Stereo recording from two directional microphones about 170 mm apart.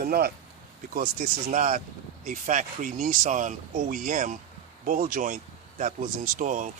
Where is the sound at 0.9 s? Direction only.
50° right (ahead or behind).